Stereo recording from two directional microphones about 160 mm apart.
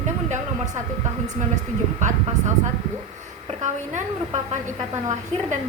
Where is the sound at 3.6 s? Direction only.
50° right (ahead or behind).